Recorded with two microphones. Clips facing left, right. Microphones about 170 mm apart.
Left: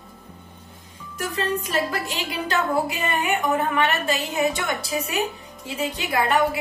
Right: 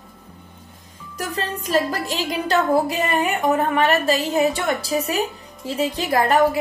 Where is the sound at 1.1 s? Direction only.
35° right (ahead or behind).